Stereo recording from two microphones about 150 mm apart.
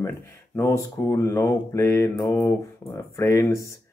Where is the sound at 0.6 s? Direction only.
20° left (ahead or behind).